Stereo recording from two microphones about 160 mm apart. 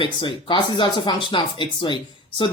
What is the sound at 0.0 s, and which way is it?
Speech, 30° left (ahead or behind).